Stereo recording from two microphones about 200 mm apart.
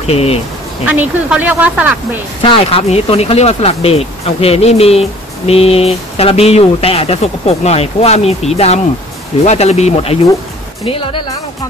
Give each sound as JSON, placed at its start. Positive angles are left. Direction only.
{"t": 0.0, "sound": "speech", "side_deg": 30}
{"t": 0.8, "sound": "speech", "side_deg": -10}
{"t": 2.4, "sound": "speech", "side_deg": 25}